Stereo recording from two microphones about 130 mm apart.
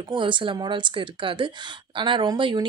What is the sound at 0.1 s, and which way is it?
Speech, 40° right (ahead or behind).